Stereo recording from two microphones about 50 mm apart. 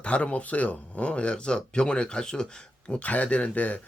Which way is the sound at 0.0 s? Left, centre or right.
Left.